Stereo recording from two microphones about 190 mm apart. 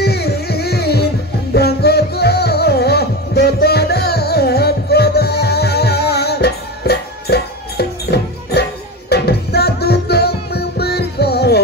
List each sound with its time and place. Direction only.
0.0 s music: 55° left (ahead or behind)